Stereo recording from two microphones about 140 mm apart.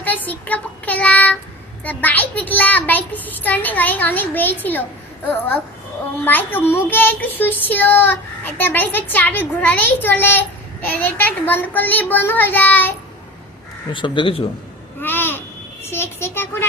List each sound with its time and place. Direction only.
0.0 s child singing: 10° left (ahead or behind)
6.2 s speech: 15° left (ahead or behind)
13.9 s speech: 35° left (ahead or behind)
15.0 s babbling: 15° left (ahead or behind)
15.9 s speech: 15° left (ahead or behind)